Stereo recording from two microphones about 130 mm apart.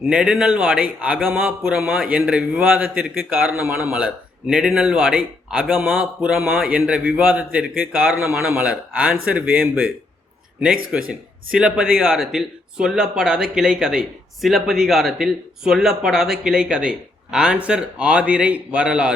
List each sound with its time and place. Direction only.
0.1 s a man's voice: 5° right (ahead or behind)